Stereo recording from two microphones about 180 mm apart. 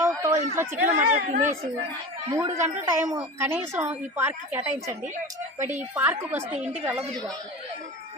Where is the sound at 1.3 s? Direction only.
45° right (ahead or behind).